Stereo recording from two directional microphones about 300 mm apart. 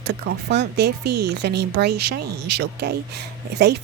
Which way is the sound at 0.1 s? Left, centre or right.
Right.